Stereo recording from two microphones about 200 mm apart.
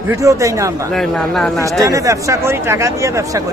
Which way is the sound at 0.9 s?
Centre (ahead or behind).